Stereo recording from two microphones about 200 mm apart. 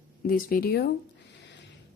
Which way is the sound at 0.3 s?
45° left (ahead or behind).